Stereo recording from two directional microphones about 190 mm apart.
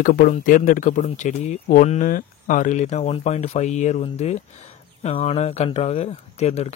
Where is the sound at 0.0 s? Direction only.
45° left (ahead or behind).